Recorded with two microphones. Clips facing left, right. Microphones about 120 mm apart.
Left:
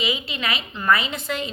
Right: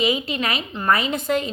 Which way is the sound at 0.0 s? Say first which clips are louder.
Right 5 dB; 45° right (ahead or behind).